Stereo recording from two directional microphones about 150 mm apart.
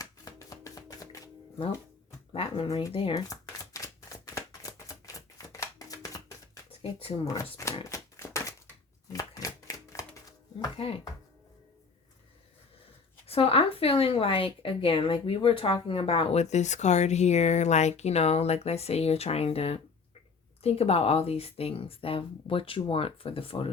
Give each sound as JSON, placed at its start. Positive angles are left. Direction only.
{"t": 0.0, "sound": "music", "side_deg": 25}
{"t": 2.3, "sound": "speech", "side_deg": 40}
{"t": 3.2, "sound": "shuffling cards", "side_deg": 20}
{"t": 7.9, "sound": "a sound", "side_deg": 20}
{"t": 10.8, "sound": "speech", "side_deg": 40}
{"t": 13.2, "sound": "a woman's voice", "side_deg": 40}